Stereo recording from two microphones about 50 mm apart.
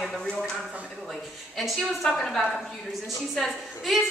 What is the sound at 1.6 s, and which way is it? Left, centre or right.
A woman's voice, centre.